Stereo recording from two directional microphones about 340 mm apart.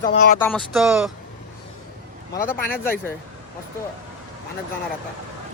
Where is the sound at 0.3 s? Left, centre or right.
Centre.